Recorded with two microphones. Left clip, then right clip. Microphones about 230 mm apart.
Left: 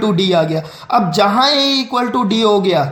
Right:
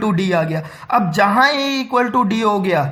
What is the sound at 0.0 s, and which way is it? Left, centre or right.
A man's voice, right.